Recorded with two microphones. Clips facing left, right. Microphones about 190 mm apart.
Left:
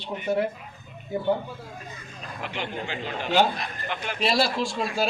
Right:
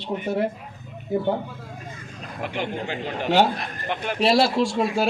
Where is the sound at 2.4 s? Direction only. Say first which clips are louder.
Right 4 dB; 50° right (ahead or behind).